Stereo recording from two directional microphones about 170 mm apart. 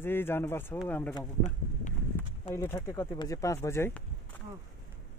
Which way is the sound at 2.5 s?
15° left (ahead or behind).